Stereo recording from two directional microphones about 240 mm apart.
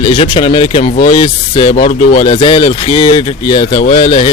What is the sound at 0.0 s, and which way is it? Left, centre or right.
Speech, left.